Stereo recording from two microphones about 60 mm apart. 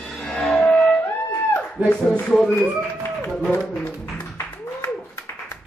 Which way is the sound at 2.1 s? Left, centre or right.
Centre.